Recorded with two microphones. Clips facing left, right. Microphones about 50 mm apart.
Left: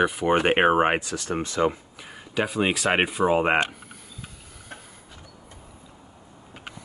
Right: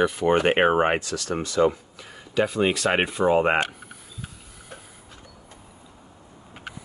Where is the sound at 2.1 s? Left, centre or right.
Centre.